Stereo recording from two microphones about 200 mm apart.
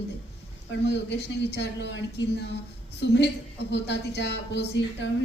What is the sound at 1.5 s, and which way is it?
Speech, 60° left (ahead or behind).